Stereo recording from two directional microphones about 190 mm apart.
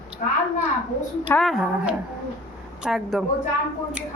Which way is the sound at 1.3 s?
Centre (ahead or behind).